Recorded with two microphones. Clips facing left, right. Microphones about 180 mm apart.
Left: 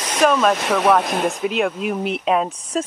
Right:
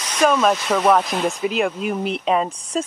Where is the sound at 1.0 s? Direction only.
55° left (ahead or behind).